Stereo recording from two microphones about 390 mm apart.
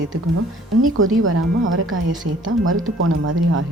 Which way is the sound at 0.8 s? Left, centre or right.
Right.